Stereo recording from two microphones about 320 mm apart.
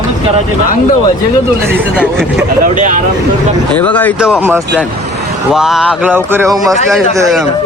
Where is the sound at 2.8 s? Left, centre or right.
Right.